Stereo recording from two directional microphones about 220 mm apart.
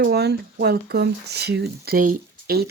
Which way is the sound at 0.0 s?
50° right (ahead or behind).